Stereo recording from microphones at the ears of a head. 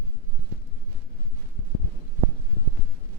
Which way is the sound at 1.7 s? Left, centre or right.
Left.